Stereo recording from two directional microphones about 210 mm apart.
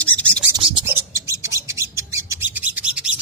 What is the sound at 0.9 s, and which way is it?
Bird, 15° right (ahead or behind).